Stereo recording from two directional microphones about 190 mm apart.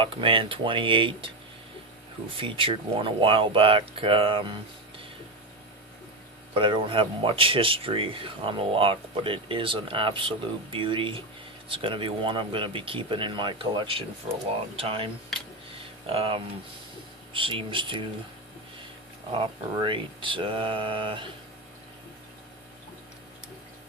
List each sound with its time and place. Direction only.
0.0 s speech: 25° right (ahead or behind)
2.4 s speech: 25° right (ahead or behind)
6.5 s speech: 25° right (ahead or behind)
19.3 s speech: 25° right (ahead or behind)